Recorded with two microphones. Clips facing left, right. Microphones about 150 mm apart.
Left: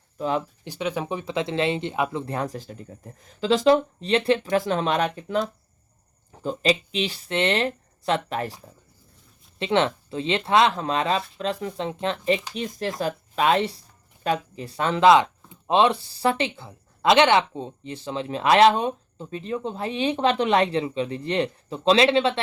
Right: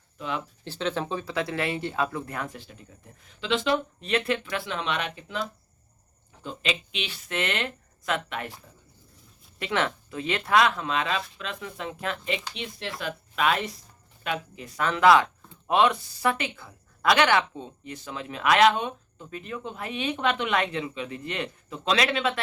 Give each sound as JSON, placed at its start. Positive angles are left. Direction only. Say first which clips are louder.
{"t": 0.2, "sound": "speech", "louder": "left 7 dB", "side_deg": 35}
{"t": 0.6, "sound": "speech", "louder": "left 1 dB", "side_deg": 15}
{"t": 6.4, "sound": "speech", "louder": "left 8 dB", "side_deg": 40}
{"t": 9.6, "sound": "speech", "louder": "left 6 dB", "side_deg": 25}